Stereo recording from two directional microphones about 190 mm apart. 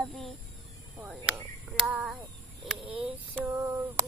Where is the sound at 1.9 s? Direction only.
5° right (ahead or behind).